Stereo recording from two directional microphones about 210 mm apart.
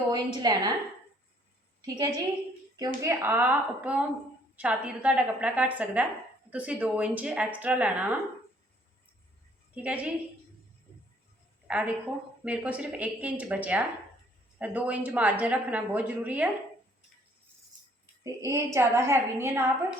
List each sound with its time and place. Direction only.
0.1 s a woman's voice: 20° right (ahead or behind)
1.8 s speech: 15° right (ahead or behind)
9.7 s speech: 5° right (ahead or behind)
11.7 s speech: 5° right (ahead or behind)
18.2 s speech: 15° right (ahead or behind)